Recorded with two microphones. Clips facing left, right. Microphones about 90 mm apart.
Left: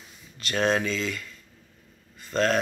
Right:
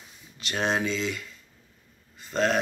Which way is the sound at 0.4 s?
15° right (ahead or behind).